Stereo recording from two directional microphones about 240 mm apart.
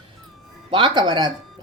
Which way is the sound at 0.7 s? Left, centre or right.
Centre.